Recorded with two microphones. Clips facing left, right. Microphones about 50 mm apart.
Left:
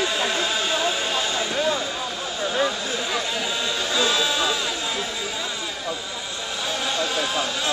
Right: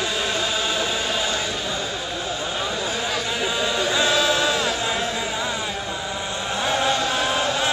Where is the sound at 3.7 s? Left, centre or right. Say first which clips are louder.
Right 2 dB; right.